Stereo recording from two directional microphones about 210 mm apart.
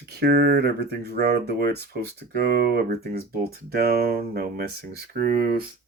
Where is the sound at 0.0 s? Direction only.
50° right (ahead or behind).